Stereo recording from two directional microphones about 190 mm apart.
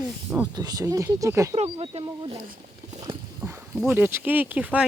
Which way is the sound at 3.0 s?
15° right (ahead or behind).